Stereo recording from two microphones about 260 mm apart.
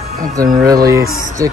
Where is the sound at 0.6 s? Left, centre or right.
Centre.